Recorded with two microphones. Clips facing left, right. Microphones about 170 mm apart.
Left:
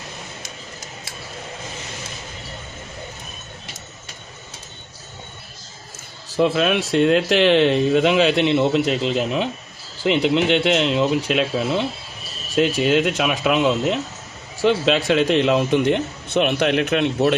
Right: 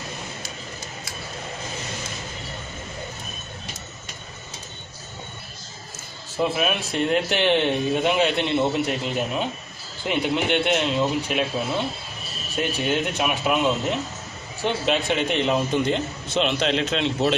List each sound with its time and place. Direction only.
6.3 s a man's voice: 85° left; by 11.4 s 70° left (ahead or behind)
12.5 s a man's voice: 70° left (ahead or behind)